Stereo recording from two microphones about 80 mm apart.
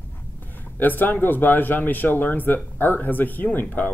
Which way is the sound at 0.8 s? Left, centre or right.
Left.